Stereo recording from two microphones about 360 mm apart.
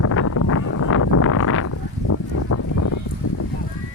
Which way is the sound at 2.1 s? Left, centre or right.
Left.